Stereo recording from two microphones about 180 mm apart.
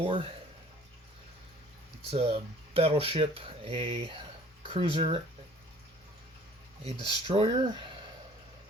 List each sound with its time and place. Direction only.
0.0 s speech: 30° right (ahead or behind)
2.0 s speech: 30° right (ahead or behind)
7.0 s speech: 25° right (ahead or behind)